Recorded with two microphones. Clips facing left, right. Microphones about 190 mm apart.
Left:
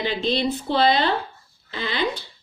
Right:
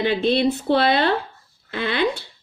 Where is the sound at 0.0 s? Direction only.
60° right (ahead or behind).